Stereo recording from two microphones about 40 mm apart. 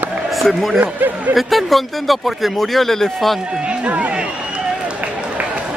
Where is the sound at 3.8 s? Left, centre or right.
Right.